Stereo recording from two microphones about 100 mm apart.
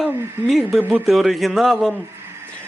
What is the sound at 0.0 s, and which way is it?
Speech, centre (ahead or behind).